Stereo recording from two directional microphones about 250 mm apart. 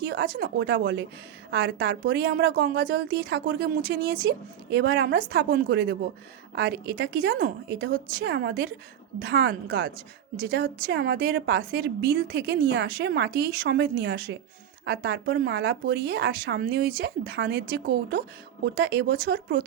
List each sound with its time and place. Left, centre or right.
0.1 s a woman's voice: right